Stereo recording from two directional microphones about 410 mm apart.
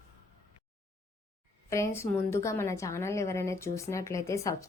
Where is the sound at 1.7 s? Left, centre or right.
Centre.